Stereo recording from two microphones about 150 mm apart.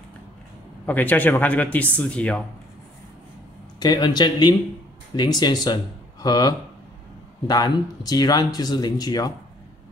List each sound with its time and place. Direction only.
0.8 s speech: 10° left (ahead or behind)
3.8 s speech: 30° left (ahead or behind)